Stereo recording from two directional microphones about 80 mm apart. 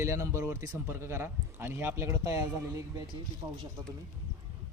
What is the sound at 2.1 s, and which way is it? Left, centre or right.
Speech, right.